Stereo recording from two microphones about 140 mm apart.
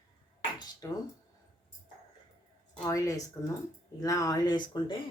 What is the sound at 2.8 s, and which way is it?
Speech, 25° left (ahead or behind).